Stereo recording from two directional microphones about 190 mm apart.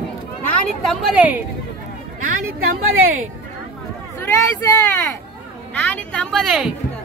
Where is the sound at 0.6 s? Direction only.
Centre (ahead or behind).